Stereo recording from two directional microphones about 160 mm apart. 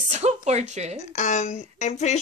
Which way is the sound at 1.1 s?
50° left (ahead or behind).